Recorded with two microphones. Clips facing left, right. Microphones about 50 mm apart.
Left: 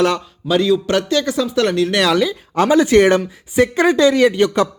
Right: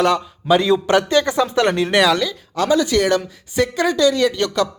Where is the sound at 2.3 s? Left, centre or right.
Left.